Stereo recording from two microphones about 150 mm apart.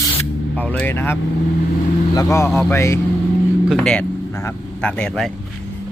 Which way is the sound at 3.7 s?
5° left (ahead or behind).